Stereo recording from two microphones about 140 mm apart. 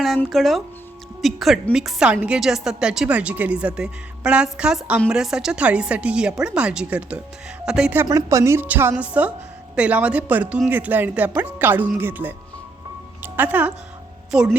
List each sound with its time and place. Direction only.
0.2 s a woman's voice: centre (ahead or behind)
8.0 s a woman's voice: 20° right (ahead or behind); by 14.5 s 5° right (ahead or behind)